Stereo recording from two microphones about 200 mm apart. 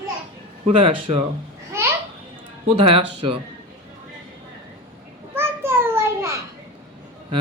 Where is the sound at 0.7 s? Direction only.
25° right (ahead or behind).